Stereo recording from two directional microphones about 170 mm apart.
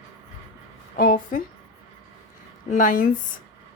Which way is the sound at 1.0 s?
50° left (ahead or behind).